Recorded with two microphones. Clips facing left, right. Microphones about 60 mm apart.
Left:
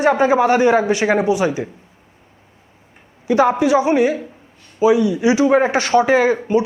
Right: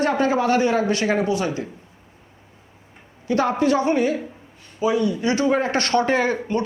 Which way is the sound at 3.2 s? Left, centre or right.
Centre.